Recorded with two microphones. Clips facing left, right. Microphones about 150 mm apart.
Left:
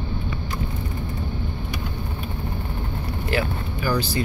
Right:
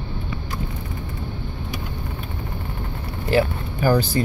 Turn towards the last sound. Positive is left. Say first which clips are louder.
# right 5 dB
turn(degrees=-50)  # may be behind; listen again after turning